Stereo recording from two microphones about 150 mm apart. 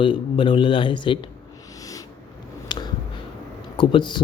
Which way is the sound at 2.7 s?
30° left (ahead or behind).